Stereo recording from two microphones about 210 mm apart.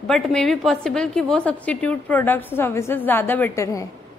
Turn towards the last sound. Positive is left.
turn(degrees=15)  # may be behind; listen again after turning